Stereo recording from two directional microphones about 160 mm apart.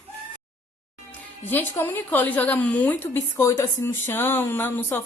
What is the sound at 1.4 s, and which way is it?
A woman's voice, 10° left (ahead or behind).